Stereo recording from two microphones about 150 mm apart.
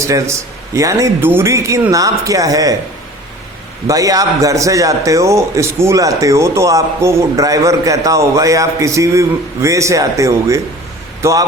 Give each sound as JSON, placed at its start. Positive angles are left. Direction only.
{"t": 0.0, "sound": "a man's voice", "side_deg": -20}
{"t": 3.8, "sound": "a man's voice", "side_deg": -20}